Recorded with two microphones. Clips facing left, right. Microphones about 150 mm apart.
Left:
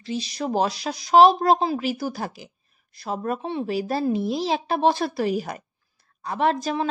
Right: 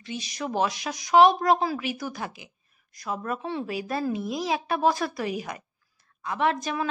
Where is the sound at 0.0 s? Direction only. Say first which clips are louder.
Left 5 dB; 30° left (ahead or behind).